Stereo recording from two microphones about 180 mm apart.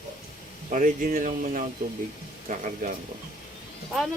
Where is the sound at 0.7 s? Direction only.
50° right (ahead or behind).